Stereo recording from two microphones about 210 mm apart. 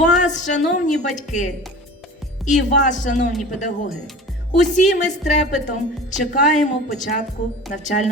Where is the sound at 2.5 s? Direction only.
35° left (ahead or behind).